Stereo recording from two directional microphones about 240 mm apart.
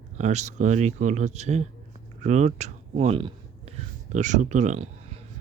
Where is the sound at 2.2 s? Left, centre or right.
Right.